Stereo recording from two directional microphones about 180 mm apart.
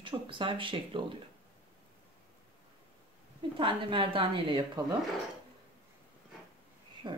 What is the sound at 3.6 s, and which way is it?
Speech, 30° right (ahead or behind).